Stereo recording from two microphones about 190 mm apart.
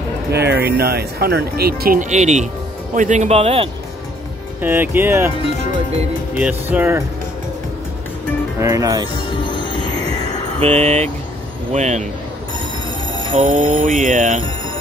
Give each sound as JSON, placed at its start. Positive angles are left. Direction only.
{"t": 0.3, "sound": "speech", "side_deg": -60}
{"t": 4.6, "sound": "speech", "side_deg": -10}
{"t": 6.3, "sound": "speech", "side_deg": -10}
{"t": 8.5, "sound": "speech", "side_deg": -20}
{"t": 9.1, "sound": "music", "side_deg": 25}
{"t": 10.6, "sound": "speech", "side_deg": -35}
{"t": 13.3, "sound": "speech", "side_deg": -40}